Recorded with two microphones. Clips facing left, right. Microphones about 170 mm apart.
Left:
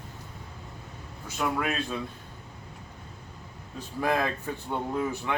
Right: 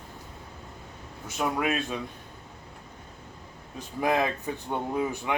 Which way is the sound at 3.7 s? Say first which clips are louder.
Right 2 dB; 20° right (ahead or behind).